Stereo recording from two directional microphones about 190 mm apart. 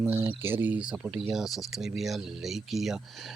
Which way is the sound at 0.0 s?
10° right (ahead or behind).